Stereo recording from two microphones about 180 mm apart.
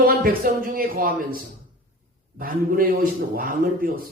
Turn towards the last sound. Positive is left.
turn(degrees=-55)  # may be behind; listen again after turning